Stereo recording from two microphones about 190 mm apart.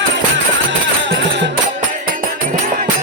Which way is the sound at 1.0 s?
70° right (ahead or behind).